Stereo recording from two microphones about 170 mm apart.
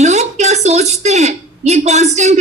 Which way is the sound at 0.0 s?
40° right (ahead or behind).